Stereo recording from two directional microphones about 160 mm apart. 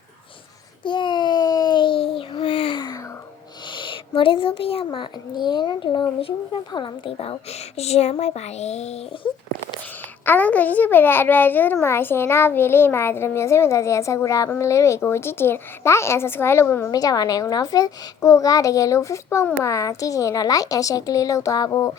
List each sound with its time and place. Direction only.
0.9 s a sound: 30° left (ahead or behind)
3.8 s a child's voice: 35° left (ahead or behind)
10.2 s a child's voice: 10° left (ahead or behind)